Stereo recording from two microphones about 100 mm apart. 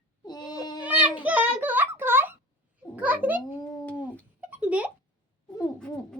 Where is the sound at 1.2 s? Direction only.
15° right (ahead or behind).